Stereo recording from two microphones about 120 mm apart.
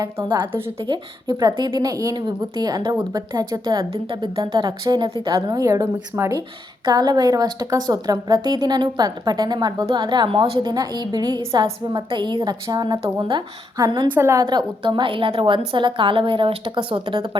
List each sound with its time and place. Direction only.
0.8 s a woman's voice: 40° right (ahead or behind)
3.9 s a woman's voice: 45° right (ahead or behind)
5.5 s a woman's voice: 25° right (ahead or behind)
6.8 s a woman's voice: 35° right (ahead or behind); by 10.6 s 50° right (ahead or behind)
10.6 s a woman's voice: 35° right (ahead or behind)
14.1 s a woman's voice: 20° right (ahead or behind); by 17.3 s 45° right (ahead or behind)